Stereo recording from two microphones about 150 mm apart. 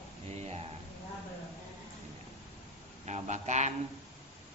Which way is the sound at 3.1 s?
50° right (ahead or behind).